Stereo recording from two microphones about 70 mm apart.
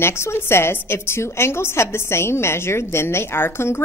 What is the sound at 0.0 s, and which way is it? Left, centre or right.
A woman's voice, left.